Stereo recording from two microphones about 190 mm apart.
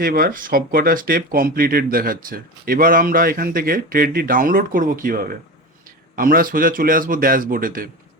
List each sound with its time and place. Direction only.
0.0 s speech: 50° right (ahead or behind)